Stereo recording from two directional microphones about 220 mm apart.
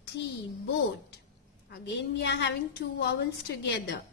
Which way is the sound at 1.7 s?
50° left (ahead or behind).